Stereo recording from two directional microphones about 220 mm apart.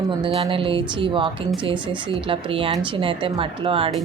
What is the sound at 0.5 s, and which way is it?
Speech, 25° right (ahead or behind).